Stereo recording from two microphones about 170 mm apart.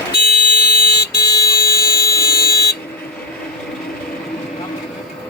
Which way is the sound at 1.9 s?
20° left (ahead or behind).